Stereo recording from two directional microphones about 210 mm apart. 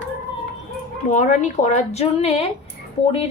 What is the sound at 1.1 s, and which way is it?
A woman's voice, 35° left (ahead or behind).